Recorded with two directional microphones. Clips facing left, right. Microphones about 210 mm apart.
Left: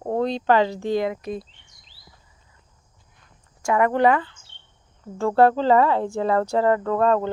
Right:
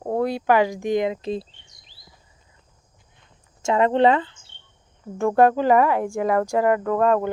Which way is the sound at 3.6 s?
25° right (ahead or behind).